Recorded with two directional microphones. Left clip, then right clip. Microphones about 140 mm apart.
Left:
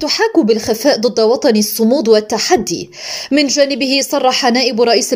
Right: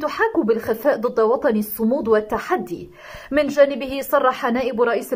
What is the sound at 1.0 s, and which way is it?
Speech, 5° left (ahead or behind).